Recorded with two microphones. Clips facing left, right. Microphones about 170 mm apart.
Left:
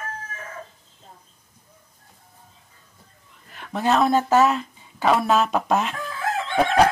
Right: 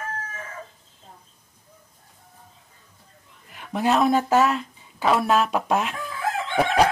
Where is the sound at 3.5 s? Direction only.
10° right (ahead or behind).